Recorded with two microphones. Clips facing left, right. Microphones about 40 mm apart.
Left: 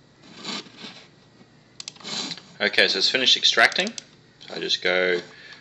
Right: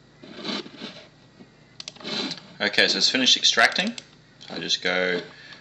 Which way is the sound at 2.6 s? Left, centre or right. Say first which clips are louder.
Left 1 dB; centre.